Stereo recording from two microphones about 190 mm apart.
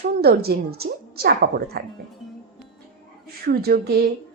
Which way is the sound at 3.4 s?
55° right (ahead or behind).